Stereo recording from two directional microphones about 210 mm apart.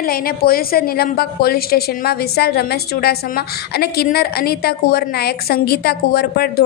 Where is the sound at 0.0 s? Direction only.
45° left (ahead or behind).